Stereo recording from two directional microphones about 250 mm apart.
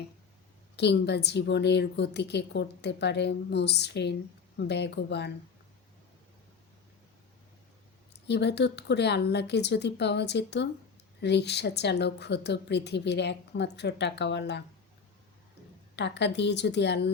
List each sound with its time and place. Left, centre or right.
0.8 s a woman's voice: left
8.1 s a woman's voice: left
16.0 s a woman's voice: left